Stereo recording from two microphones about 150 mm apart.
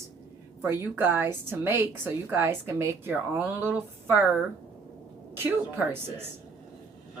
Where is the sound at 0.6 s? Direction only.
15° right (ahead or behind).